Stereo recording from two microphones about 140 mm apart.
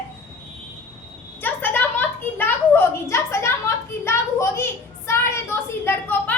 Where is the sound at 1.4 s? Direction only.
10° left (ahead or behind).